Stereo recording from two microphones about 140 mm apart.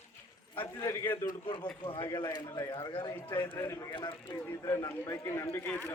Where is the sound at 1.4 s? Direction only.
35° left (ahead or behind); by 3.9 s 20° left (ahead or behind).